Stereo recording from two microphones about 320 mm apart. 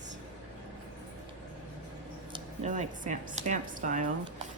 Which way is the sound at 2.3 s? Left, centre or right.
Right.